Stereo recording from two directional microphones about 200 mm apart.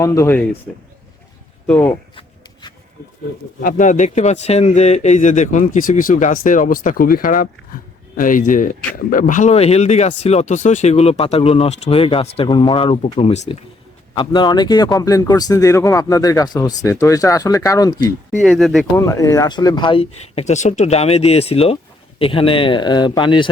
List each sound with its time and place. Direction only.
0.0 s speech: 15° left (ahead or behind)
1.6 s speech: 10° left (ahead or behind)
2.1 s shuffling cards: 20° left (ahead or behind)
3.6 s speech: 40° left (ahead or behind); by 18.0 s 15° left (ahead or behind)
18.4 s speech: centre (ahead or behind)
18.9 s speech: 15° left (ahead or behind)